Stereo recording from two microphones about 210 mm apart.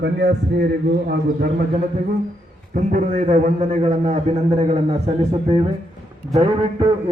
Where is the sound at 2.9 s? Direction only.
40° right (ahead or behind).